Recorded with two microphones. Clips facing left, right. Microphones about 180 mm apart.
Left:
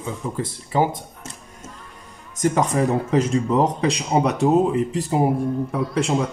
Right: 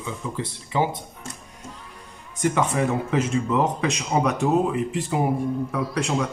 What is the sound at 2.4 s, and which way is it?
Speech, 40° left (ahead or behind).